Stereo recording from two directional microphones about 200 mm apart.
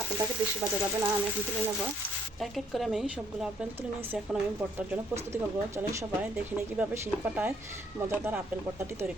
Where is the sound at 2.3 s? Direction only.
Centre (ahead or behind).